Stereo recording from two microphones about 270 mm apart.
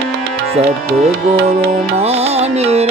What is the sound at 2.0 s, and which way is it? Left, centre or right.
Music, right.